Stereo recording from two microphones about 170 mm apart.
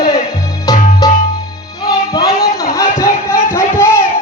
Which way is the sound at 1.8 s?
25° left (ahead or behind).